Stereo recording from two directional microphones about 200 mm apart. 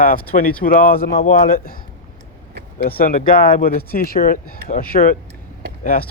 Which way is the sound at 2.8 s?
45° left (ahead or behind).